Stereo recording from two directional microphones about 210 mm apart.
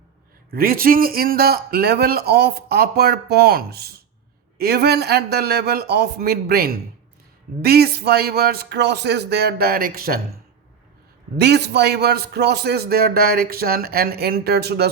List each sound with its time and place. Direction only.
0.5 s a man's voice: 45° right (ahead or behind)
11.3 s a man's voice: 50° right (ahead or behind)